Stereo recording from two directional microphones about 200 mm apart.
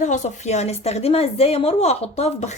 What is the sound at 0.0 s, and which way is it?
A woman's voice, 40° left (ahead or behind).